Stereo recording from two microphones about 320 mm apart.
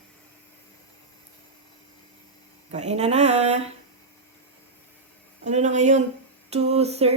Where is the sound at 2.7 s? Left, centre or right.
Right.